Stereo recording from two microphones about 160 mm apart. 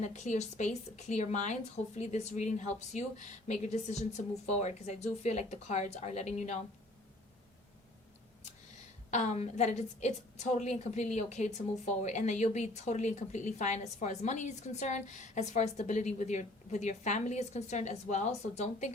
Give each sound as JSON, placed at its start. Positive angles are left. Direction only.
{"t": 0.0, "sound": "a woman's voice", "side_deg": 45}
{"t": 9.0, "sound": "a woman's voice", "side_deg": 45}